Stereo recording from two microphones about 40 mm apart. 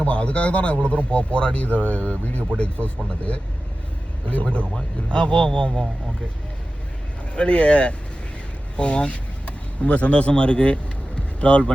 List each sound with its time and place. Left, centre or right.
0.0 s speech: left
4.7 s speech: left
7.3 s speech: left